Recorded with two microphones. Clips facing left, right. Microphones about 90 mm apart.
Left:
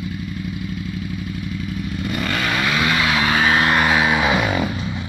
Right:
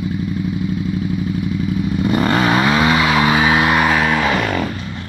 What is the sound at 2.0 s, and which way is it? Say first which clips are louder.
Vehicle: right 8 dB; 35° right (ahead or behind).